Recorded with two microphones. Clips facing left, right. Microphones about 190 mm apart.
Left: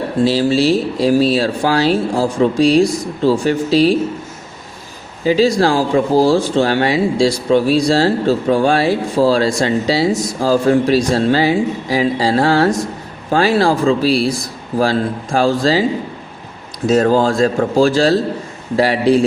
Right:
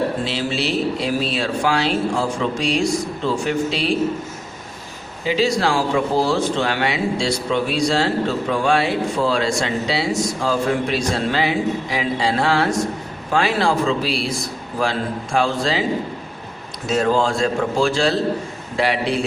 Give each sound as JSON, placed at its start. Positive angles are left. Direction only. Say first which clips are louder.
{"t": 0.3, "sound": "speech", "louder": "left 9 dB", "side_deg": 35}
{"t": 5.2, "sound": "speech", "louder": "left 6 dB", "side_deg": 40}
{"t": 16.9, "sound": "speech", "louder": "left 5 dB", "side_deg": 40}